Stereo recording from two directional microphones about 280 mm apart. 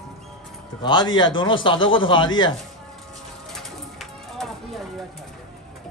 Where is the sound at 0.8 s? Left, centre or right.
Centre.